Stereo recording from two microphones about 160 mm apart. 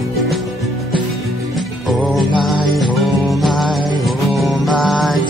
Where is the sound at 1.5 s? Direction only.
Centre (ahead or behind).